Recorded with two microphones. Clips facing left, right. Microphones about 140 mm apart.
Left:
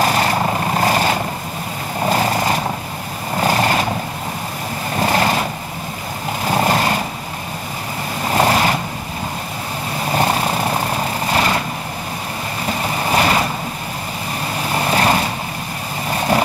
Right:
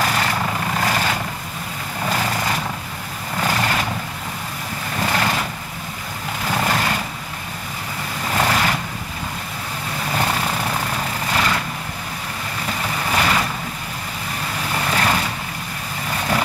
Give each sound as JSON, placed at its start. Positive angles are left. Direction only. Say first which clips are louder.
{"t": 0.0, "sound": "vehicle", "louder": "left 5 dB", "side_deg": 35}
{"t": 4.9, "sound": "vehicle", "louder": "left 5 dB", "side_deg": 35}
{"t": 6.4, "sound": "a sound", "louder": "left 5 dB", "side_deg": 35}
{"t": 8.3, "sound": "vehicle", "louder": "left 4 dB", "side_deg": 35}
{"t": 10.1, "sound": "vehicle", "louder": "left 5 dB", "side_deg": 30}
{"t": 12.6, "sound": "vehicle", "louder": "left 4 dB", "side_deg": 35}
{"t": 14.7, "sound": "vehicle", "louder": "left 4 dB", "side_deg": 30}